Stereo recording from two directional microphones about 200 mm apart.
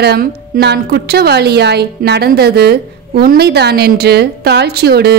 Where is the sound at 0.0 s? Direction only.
55° right (ahead or behind).